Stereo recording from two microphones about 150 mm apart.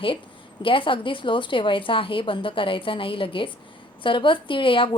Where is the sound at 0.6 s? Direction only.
35° left (ahead or behind).